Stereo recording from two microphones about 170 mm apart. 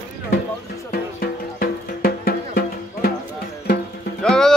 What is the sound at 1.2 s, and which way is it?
Music, 60° left (ahead or behind).